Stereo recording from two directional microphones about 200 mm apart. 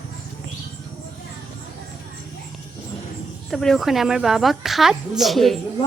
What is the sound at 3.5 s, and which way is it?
Speech, centre (ahead or behind).